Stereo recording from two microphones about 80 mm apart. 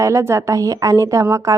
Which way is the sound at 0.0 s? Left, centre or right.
Right.